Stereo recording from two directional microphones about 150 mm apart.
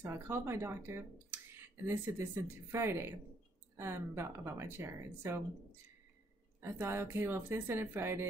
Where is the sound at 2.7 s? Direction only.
15° right (ahead or behind).